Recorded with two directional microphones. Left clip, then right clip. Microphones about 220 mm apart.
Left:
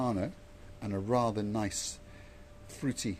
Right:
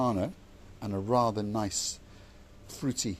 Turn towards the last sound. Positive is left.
turn(degrees=-15)  # may be behind; listen again after turning